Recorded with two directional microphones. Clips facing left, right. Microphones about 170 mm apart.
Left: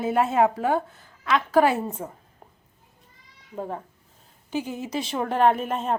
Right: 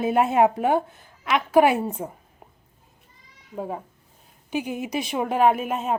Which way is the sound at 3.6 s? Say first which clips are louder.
Right 1 dB; 5° right (ahead or behind).